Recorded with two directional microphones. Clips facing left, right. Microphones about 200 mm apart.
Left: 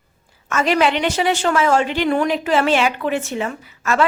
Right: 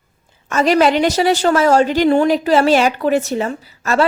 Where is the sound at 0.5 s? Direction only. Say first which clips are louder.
Right 4 dB; 35° right (ahead or behind).